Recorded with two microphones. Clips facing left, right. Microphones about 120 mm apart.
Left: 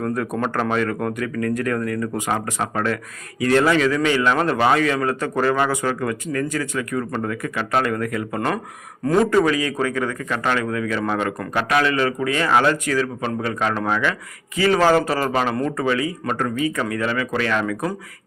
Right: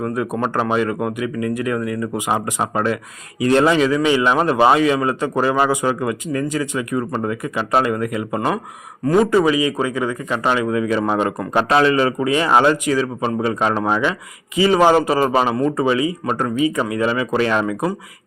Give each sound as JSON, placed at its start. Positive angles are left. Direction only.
{"t": 0.0, "sound": "speech", "side_deg": -10}